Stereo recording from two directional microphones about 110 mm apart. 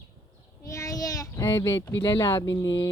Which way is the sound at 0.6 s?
30° left (ahead or behind).